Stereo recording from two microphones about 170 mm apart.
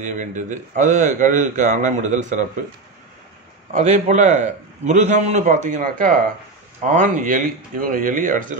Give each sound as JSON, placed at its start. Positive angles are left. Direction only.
{"t": 0.0, "sound": "a man's voice", "side_deg": -45}
{"t": 3.7, "sound": "a man's voice", "side_deg": -45}